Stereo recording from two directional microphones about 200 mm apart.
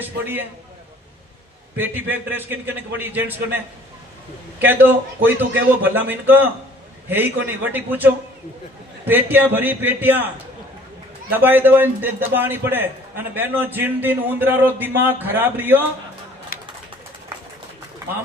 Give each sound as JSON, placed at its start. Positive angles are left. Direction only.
{"t": 0.0, "sound": "a man's voice", "side_deg": -10}
{"t": 1.8, "sound": "a man's voice", "side_deg": -10}
{"t": 4.6, "sound": "a man's voice", "side_deg": -10}
{"t": 11.3, "sound": "a man's voice", "side_deg": -10}
{"t": 16.5, "sound": "bird", "side_deg": 50}